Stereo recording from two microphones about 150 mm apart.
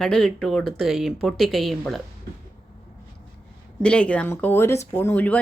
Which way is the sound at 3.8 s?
5° left (ahead or behind).